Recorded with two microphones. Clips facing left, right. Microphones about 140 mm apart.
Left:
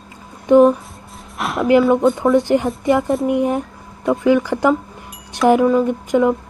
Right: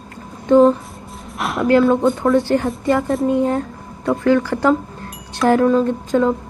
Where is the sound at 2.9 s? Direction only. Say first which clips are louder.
Left 2 dB; 20° left (ahead or behind).